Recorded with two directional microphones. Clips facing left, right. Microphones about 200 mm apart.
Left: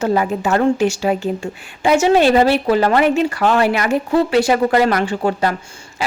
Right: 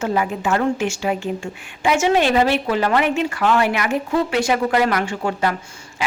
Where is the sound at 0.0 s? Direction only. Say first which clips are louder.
Left 4 dB; 40° left (ahead or behind).